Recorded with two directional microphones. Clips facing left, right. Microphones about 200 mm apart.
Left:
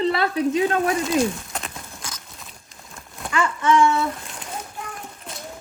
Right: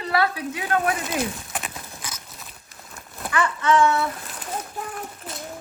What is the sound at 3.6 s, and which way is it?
Speech, 15° left (ahead or behind).